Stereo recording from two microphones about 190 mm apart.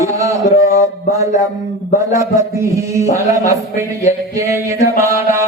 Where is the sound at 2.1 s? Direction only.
15° right (ahead or behind).